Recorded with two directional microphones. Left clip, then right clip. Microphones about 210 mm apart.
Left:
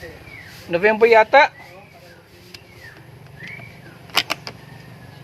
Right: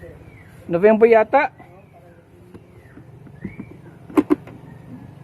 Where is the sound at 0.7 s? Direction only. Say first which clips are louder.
Even; 40° right (ahead or behind).